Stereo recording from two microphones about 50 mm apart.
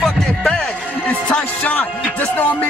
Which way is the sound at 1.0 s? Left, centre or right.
Left.